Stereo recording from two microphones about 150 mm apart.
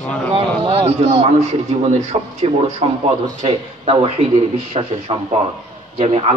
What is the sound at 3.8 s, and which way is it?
A man's voice, 40° right (ahead or behind).